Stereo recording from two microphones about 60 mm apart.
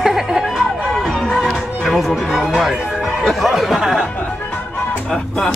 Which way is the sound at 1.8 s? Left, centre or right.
Centre.